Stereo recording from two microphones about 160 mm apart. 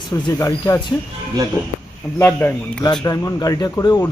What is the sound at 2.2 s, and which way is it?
Speech, 15° left (ahead or behind).